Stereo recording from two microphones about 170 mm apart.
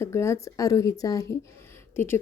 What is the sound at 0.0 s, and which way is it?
Speech, 15° left (ahead or behind).